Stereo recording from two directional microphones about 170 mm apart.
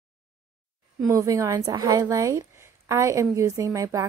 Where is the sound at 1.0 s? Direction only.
20° right (ahead or behind).